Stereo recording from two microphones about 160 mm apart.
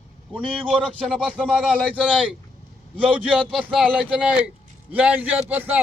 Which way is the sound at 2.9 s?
10° right (ahead or behind).